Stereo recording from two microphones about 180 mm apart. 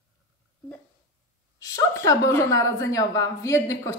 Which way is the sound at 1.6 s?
20° left (ahead or behind).